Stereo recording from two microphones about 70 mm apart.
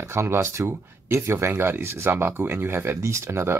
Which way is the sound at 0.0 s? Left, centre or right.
Right.